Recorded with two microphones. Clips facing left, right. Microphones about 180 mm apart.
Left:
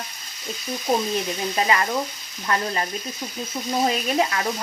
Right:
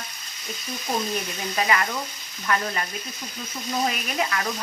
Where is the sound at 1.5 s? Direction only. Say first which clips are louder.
Left 2 dB; 25° left (ahead or behind).